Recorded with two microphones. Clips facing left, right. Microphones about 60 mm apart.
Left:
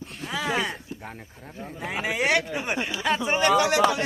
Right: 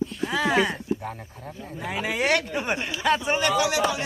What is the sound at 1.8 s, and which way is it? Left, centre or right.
Speech, centre.